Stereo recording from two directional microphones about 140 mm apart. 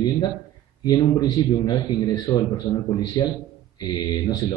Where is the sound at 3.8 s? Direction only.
30° left (ahead or behind).